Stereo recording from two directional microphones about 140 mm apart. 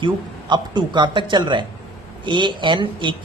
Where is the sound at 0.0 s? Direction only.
35° right (ahead or behind).